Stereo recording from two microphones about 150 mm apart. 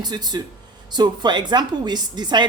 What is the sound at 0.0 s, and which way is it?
A woman's voice, 25° right (ahead or behind).